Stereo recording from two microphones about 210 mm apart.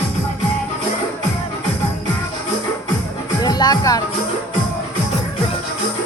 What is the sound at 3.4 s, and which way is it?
Music, 20° left (ahead or behind).